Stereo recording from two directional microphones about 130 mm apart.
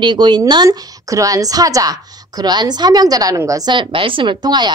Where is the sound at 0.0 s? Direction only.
35° right (ahead or behind).